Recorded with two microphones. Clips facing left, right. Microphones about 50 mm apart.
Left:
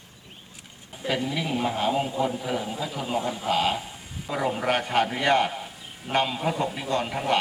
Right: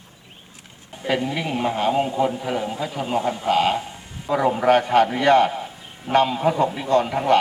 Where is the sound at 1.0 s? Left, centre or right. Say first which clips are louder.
Right 4 dB; centre.